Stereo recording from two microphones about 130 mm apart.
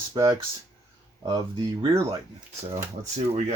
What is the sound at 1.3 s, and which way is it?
Speech, 30° right (ahead or behind).